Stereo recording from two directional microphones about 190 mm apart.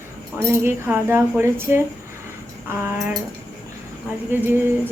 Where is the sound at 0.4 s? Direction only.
10° right (ahead or behind).